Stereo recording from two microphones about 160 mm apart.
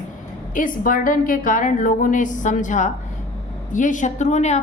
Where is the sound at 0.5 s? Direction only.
55° left (ahead or behind).